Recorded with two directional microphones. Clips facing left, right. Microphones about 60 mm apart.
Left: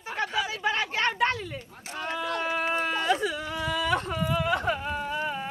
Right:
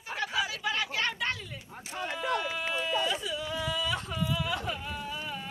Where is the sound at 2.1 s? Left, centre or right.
Left.